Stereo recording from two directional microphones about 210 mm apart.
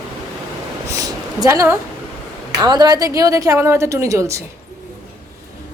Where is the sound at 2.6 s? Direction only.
20° right (ahead or behind).